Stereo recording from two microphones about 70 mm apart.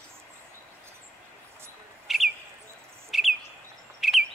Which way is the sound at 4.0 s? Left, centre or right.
Centre.